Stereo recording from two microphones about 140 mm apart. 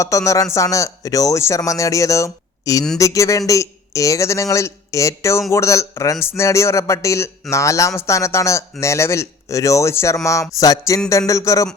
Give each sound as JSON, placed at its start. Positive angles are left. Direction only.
{"t": 0.0, "sound": "a man's voice", "side_deg": 20}